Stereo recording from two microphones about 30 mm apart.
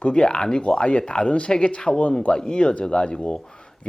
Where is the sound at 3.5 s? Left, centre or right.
Left.